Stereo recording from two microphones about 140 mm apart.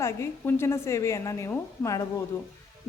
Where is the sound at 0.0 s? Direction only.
20° left (ahead or behind).